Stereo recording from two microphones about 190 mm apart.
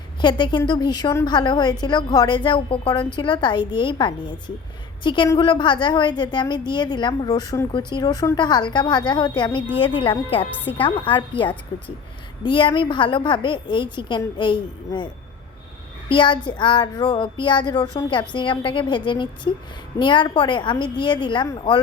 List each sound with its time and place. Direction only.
0.2 s a woman's voice: 25° left (ahead or behind)
10.5 s speech: 10° left (ahead or behind)
10.8 s a woman's voice: 25° left (ahead or behind)